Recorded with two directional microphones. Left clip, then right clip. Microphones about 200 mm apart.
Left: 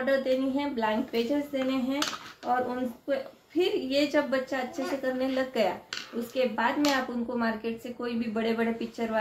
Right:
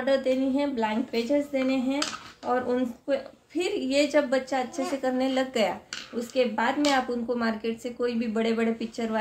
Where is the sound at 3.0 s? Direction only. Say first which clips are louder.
Right 2 dB; 45° right (ahead or behind).